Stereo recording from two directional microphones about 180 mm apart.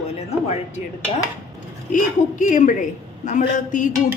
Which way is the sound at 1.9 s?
45° left (ahead or behind).